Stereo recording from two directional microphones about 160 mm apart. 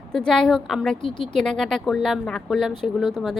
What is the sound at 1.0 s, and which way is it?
Speech, 30° left (ahead or behind).